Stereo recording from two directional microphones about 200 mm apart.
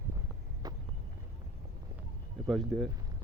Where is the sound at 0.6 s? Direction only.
20° right (ahead or behind).